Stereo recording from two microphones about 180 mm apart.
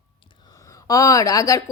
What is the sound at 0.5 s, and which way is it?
Speech, 20° left (ahead or behind).